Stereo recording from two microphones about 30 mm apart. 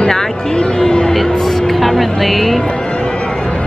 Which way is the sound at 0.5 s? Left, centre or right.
Left.